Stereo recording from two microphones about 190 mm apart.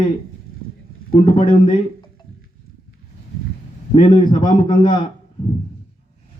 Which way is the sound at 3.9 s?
25° left (ahead or behind).